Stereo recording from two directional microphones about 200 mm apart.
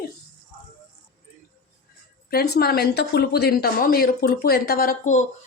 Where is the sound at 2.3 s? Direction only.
50° left (ahead or behind).